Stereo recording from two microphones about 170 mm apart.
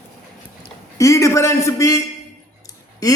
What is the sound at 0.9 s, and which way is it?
A man's voice, 20° left (ahead or behind).